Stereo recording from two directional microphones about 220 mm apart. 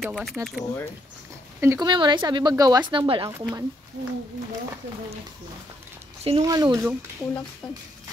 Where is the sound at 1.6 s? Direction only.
15° right (ahead or behind).